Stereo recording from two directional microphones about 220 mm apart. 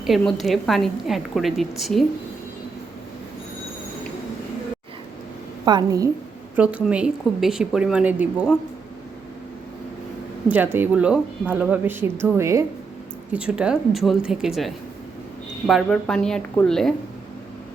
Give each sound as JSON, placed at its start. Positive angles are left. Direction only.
{"t": 0.0, "sound": "a woman's voice", "side_deg": 0}
{"t": 5.6, "sound": "a woman's voice", "side_deg": -15}
{"t": 6.6, "sound": "a woman's voice", "side_deg": -5}
{"t": 10.5, "sound": "a woman's voice", "side_deg": -10}